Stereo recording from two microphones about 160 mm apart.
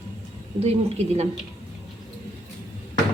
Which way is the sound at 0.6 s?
40° right (ahead or behind).